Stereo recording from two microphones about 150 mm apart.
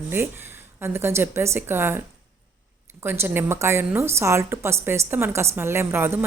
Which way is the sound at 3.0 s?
15° right (ahead or behind).